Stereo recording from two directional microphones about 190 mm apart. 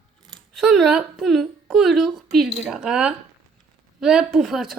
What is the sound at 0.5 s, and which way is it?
A woman's voice, 5° right (ahead or behind).